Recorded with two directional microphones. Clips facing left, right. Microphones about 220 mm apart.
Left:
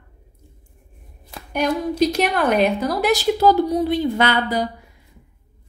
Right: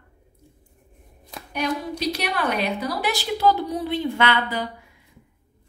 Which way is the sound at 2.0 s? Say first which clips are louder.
Left 7 dB; 45° left (ahead or behind).